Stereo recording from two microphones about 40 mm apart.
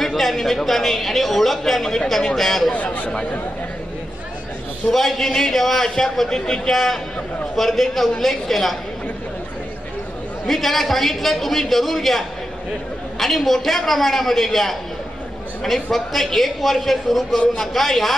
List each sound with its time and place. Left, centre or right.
0.0 s a man's voice: centre
2.7 s speech: left
4.9 s a man's voice: centre
6.7 s a man's voice: centre
10.4 s a man's voice: centre